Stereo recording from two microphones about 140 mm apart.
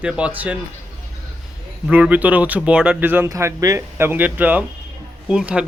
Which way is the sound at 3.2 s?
25° right (ahead or behind).